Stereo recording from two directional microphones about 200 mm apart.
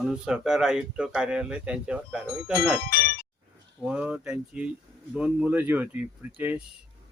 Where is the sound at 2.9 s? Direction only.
50° left (ahead or behind).